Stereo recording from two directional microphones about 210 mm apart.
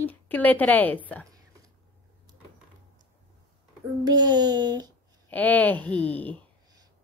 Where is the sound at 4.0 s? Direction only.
20° right (ahead or behind).